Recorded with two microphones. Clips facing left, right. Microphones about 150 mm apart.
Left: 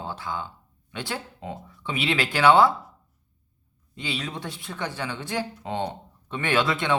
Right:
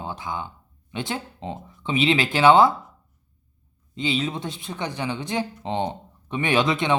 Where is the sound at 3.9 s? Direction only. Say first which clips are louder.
Right 7 dB; 20° right (ahead or behind).